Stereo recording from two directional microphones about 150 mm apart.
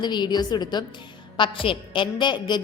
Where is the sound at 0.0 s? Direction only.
30° left (ahead or behind).